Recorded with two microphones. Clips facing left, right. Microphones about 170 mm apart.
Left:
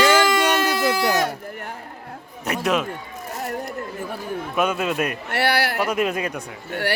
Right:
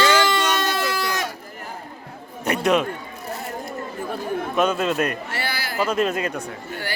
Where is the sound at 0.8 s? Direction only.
60° left (ahead or behind).